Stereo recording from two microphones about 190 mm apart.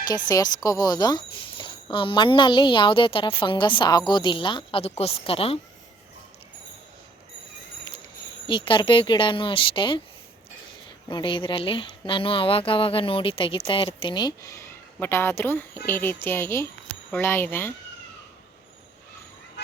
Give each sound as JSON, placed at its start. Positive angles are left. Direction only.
{"t": 0.1, "sound": "speech", "side_deg": 20}
{"t": 8.4, "sound": "speech", "side_deg": 25}
{"t": 11.1, "sound": "speech", "side_deg": 25}
{"t": 19.6, "sound": "a sound", "side_deg": 65}